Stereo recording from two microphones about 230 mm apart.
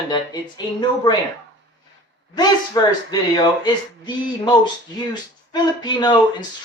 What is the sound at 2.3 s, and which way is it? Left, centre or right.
Speech, centre.